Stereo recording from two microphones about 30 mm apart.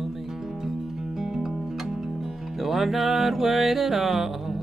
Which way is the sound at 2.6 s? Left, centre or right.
Centre.